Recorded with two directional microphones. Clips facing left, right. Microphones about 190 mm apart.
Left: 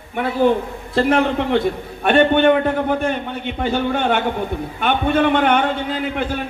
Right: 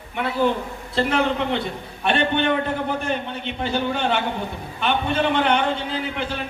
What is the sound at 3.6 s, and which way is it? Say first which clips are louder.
A man's voice: left 4 dB; 50° left (ahead or behind).